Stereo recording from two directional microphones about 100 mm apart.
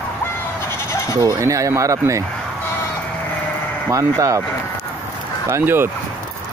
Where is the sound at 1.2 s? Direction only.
35° right (ahead or behind).